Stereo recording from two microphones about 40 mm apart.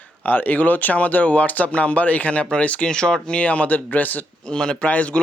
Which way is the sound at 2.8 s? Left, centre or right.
Left.